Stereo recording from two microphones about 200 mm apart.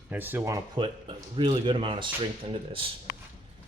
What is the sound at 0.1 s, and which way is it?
Speech, 10° right (ahead or behind).